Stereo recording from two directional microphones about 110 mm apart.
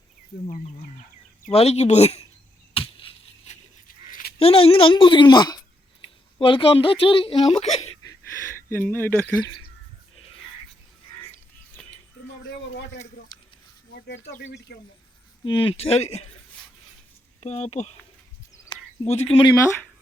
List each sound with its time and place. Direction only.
1.5 s speech: 70° left (ahead or behind)
2.7 s a sound: 55° left (ahead or behind)
3.5 s dog: 90° left
4.4 s a woman's voice: 60° left (ahead or behind); by 5.5 s 40° left (ahead or behind)
6.4 s a woman's voice: 55° left (ahead or behind); by 7.9 s 80° left
8.7 s speech: 20° left (ahead or behind)
15.4 s speech: 50° left (ahead or behind); by 16.3 s 70° left (ahead or behind)
17.4 s speech: 85° left
19.0 s speech: 75° left (ahead or behind)